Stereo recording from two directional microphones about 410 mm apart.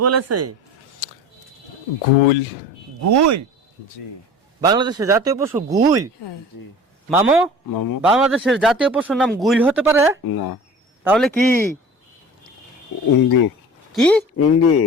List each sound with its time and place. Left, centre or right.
0.0 s speech: right
3.0 s speech: right
4.6 s speech: centre
7.1 s speech: centre
7.7 s speech: left
8.0 s speech: centre
10.2 s speech: left
11.0 s speech: centre
13.1 s speech: left
13.9 s speech: centre
14.3 s speech: left